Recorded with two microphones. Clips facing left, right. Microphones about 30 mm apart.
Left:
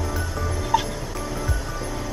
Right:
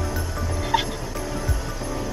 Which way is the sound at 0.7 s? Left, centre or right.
Right.